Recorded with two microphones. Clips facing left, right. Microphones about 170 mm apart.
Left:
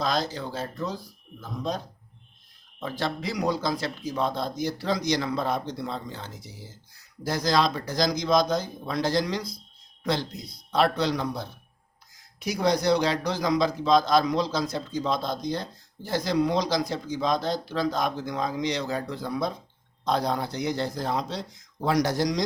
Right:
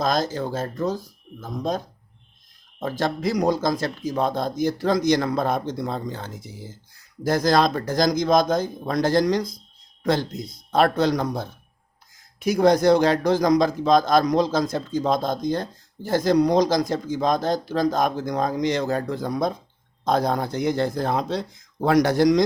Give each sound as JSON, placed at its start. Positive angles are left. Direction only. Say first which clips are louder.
{"t": 0.0, "sound": "a man's voice", "louder": "right 5 dB", "side_deg": -45}
{"t": 2.8, "sound": "a man's voice", "louder": "right 6 dB", "side_deg": -45}